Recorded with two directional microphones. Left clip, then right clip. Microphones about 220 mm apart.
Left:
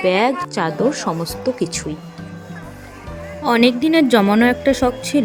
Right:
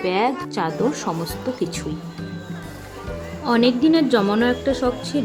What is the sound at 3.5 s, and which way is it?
A woman's voice, 40° left (ahead or behind).